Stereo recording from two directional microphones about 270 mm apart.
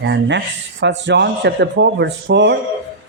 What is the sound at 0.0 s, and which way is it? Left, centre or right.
Speech, right.